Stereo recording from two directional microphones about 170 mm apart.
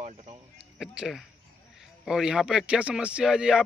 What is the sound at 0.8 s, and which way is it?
Speech, centre (ahead or behind).